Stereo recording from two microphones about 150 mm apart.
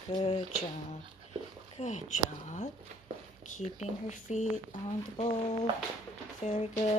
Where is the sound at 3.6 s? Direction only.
50° left (ahead or behind).